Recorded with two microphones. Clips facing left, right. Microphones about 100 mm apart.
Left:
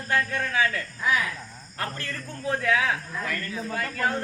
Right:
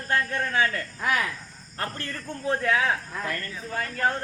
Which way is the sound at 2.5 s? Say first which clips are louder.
Even; 35° right (ahead or behind).